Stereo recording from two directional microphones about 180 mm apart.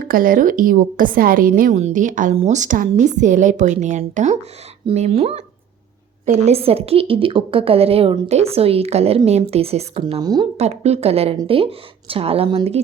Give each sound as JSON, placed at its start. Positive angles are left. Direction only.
{"t": 0.0, "sound": "a woman's voice", "side_deg": -50}
{"t": 10.6, "sound": "a woman's voice", "side_deg": -35}